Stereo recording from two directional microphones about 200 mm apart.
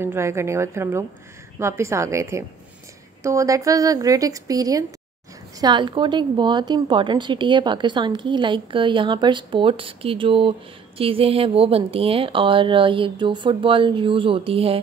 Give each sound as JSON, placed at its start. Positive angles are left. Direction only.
{"t": 0.0, "sound": "a woman's voice", "side_deg": -15}